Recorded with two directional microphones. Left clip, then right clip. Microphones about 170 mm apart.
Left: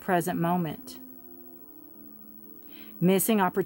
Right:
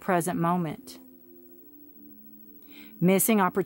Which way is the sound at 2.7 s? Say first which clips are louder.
Right 1 dB; 25° right (ahead or behind).